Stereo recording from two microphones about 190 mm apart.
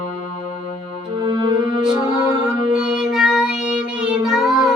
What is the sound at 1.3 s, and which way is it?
Music, 20° right (ahead or behind).